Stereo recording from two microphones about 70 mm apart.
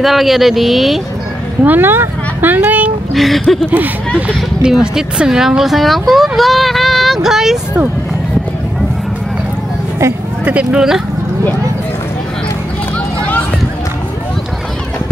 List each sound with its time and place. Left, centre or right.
0.0 s speech: centre
1.6 s speech: right
3.2 s speech: centre
4.6 s speech: centre
10.4 s speech: centre